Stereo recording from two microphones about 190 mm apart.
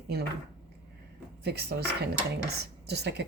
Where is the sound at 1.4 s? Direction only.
55° right (ahead or behind).